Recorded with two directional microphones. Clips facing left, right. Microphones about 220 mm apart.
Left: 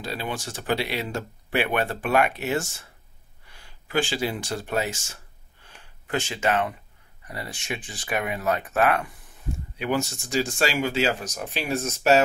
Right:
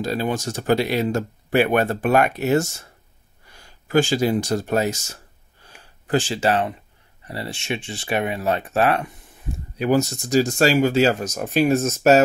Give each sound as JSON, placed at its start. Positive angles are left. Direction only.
{"t": 0.0, "sound": "speech", "side_deg": -45}
{"t": 3.4, "sound": "a sound", "side_deg": -40}
{"t": 7.2, "sound": "speech", "side_deg": -30}
{"t": 9.8, "sound": "speech", "side_deg": -40}